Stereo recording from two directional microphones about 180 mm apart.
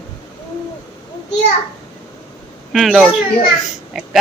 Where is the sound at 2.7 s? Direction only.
Centre (ahead or behind).